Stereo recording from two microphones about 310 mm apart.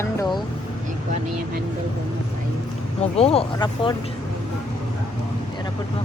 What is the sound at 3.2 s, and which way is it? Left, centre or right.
Speech, centre.